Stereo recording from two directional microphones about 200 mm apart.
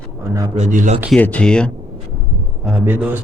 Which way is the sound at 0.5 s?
40° right (ahead or behind).